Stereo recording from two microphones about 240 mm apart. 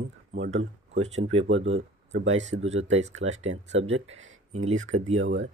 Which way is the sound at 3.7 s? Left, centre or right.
Right.